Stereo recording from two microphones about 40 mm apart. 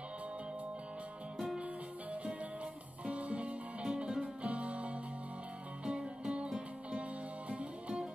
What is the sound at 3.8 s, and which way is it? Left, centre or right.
Music, centre.